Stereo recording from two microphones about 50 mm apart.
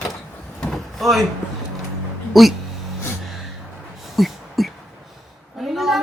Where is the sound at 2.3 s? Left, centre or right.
Centre.